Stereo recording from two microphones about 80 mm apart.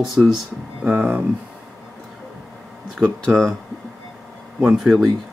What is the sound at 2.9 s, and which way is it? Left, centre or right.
Speech, centre.